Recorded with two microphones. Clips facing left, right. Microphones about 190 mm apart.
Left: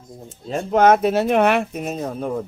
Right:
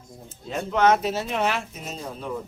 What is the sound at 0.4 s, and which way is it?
Speech, 45° left (ahead or behind).